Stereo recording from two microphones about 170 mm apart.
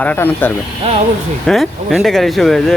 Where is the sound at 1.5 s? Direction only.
Centre (ahead or behind).